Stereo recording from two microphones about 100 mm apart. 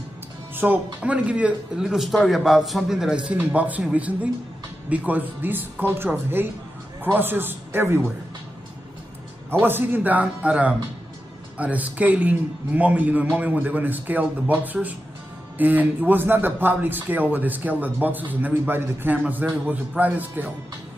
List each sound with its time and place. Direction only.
0.6 s a man's voice: 15° right (ahead or behind)
9.5 s a man's voice: 20° right (ahead or behind)